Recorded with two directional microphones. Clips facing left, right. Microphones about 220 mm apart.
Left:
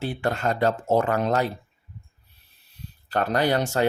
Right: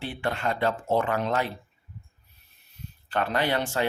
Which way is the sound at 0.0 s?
40° left (ahead or behind).